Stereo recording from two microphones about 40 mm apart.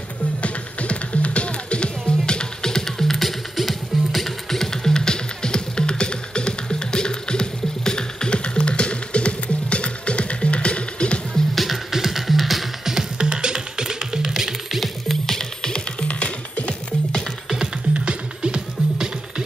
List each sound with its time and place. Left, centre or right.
0.4 s music: left
11.5 s music: centre
14.8 s music: centre; by 17.2 s left
17.9 s music: right